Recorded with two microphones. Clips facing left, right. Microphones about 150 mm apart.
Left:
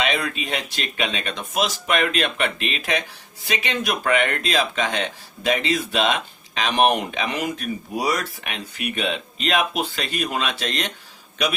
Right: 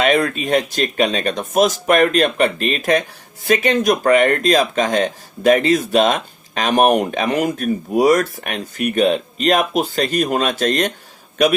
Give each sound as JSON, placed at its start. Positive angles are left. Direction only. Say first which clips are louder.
{"t": 0.0, "sound": "speech", "louder": "right 8 dB", "side_deg": -45}